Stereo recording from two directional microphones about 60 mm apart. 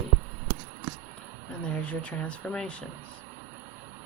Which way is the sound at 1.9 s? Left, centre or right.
Left.